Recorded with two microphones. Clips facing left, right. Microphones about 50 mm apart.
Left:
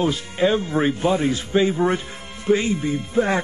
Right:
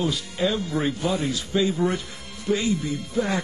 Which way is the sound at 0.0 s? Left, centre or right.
Left.